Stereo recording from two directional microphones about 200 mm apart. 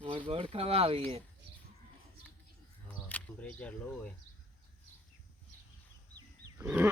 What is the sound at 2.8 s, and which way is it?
Speech, 5° left (ahead or behind).